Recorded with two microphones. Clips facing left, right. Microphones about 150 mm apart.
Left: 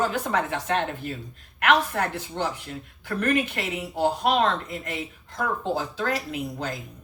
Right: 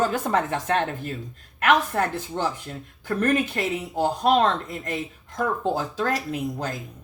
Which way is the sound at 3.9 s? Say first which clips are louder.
Right 1 dB; 45° right (ahead or behind).